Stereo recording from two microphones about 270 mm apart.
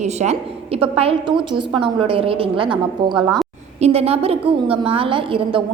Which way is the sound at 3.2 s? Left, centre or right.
Centre.